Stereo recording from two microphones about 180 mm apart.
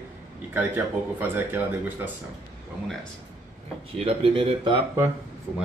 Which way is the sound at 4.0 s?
30° right (ahead or behind).